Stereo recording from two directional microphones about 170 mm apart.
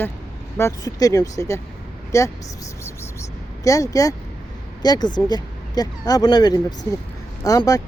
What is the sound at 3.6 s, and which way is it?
Speech, 20° left (ahead or behind).